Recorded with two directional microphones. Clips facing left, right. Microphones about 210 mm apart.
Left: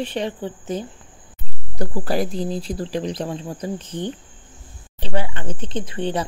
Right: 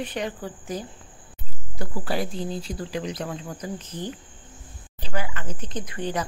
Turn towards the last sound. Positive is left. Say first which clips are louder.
# left 4 dB
turn(degrees=25)  # may be behind; listen again after turning